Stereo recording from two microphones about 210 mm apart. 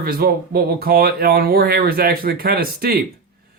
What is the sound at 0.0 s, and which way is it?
A man's voice, 45° right (ahead or behind).